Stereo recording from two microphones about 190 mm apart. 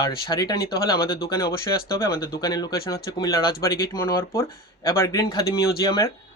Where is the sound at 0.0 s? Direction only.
20° left (ahead or behind).